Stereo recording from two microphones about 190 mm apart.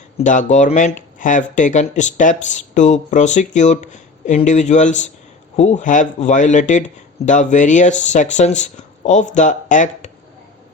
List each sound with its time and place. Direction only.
0.2 s speech: 40° left (ahead or behind)